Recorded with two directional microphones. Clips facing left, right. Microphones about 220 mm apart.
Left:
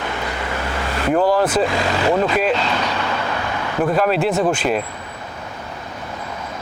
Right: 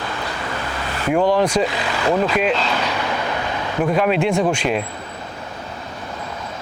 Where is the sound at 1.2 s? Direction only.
5° left (ahead or behind).